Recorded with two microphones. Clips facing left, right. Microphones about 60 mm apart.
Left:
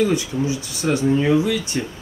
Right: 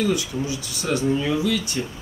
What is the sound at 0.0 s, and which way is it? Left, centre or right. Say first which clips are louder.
Speech: left 4 dB; left.